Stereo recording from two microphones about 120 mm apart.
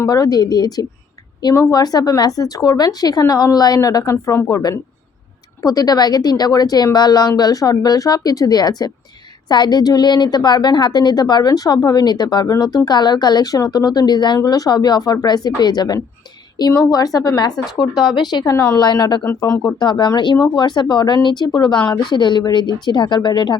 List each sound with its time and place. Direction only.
0.1 s a woman's voice: 35° left (ahead or behind)
18.9 s speech: 35° left (ahead or behind)
19.9 s a woman's voice: 40° left (ahead or behind)